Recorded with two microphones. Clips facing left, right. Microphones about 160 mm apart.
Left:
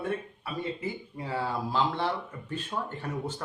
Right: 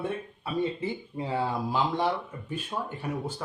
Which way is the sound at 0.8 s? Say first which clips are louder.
Right 3 dB; 20° right (ahead or behind).